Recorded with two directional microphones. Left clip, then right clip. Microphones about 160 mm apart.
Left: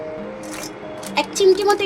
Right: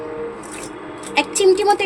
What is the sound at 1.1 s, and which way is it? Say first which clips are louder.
Speech: right 1 dB; 20° right (ahead or behind).